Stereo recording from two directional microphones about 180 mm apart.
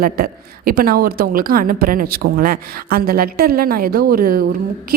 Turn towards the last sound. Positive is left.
turn(degrees=-55)  # may be behind; listen again after turning